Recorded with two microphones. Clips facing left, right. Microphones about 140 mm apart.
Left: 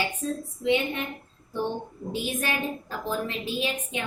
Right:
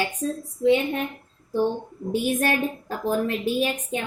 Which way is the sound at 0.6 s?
40° right (ahead or behind).